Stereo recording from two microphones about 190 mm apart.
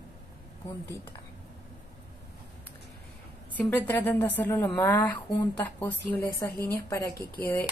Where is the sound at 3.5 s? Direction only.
10° left (ahead or behind).